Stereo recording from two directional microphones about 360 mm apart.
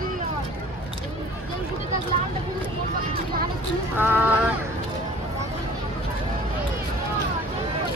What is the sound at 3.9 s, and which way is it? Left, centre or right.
Speech, centre.